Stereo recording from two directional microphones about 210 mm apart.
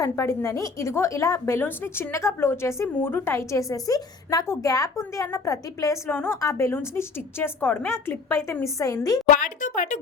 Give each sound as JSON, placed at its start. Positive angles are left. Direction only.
{"t": 0.0, "sound": "a woman's voice", "side_deg": 15}
{"t": 9.3, "sound": "speech", "side_deg": 40}